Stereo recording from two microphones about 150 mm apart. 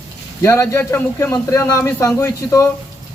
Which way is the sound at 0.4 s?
15° left (ahead or behind).